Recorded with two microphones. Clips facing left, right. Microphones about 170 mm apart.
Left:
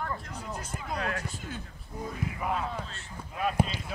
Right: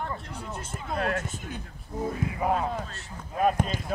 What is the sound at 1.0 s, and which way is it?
Speech, 45° right (ahead or behind).